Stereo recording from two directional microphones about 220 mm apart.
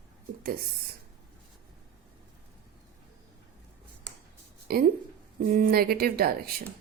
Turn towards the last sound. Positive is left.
turn(degrees=-45)  # may be behind; listen again after turning